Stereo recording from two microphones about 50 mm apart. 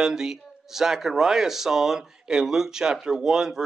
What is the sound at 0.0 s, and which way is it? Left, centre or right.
Speech, centre.